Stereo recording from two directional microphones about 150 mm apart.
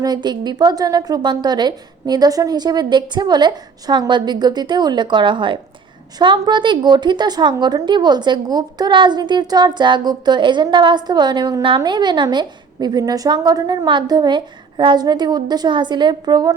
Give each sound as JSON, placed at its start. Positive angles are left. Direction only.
{"t": 0.0, "sound": "a woman's voice", "side_deg": -30}